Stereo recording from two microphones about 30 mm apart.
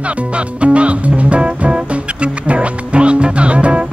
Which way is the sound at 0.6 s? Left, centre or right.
Right.